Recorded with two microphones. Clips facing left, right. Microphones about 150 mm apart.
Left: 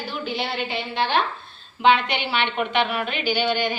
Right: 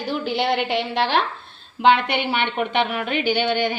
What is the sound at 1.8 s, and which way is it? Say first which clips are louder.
A woman's voice: right 2 dB; 55° right (ahead or behind).